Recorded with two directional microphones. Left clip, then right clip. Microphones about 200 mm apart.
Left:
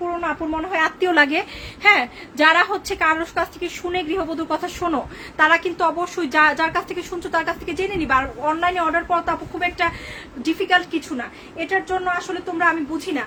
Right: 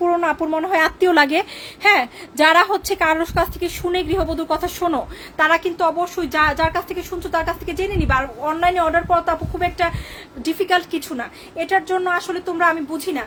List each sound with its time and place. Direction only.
0.0 s a woman's voice: 40° right (ahead or behind)
5.4 s a woman's voice: 15° right (ahead or behind); by 13.2 s 30° right (ahead or behind)